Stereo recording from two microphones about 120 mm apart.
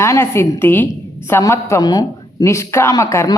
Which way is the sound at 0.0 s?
20° left (ahead or behind).